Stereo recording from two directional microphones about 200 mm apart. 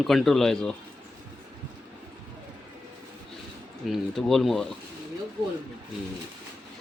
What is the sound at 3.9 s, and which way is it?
Speech, centre (ahead or behind).